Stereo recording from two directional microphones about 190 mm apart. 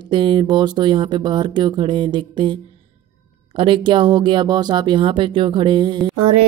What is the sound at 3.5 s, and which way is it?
Speech, 25° right (ahead or behind).